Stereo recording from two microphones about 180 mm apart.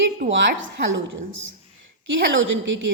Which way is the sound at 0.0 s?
90° right.